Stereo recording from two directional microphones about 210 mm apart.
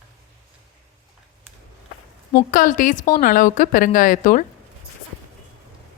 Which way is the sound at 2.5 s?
40° left (ahead or behind).